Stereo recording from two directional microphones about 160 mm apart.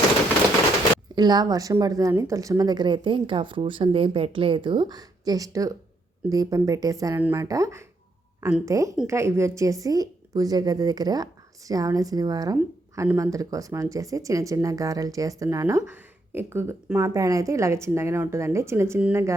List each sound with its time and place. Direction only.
1.1 s speech: 25° right (ahead or behind)